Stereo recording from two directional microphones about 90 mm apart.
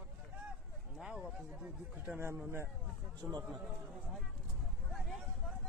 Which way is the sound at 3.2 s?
45° right (ahead or behind).